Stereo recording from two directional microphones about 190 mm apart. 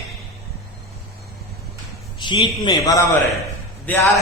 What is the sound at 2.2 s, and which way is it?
A man's voice, 25° left (ahead or behind).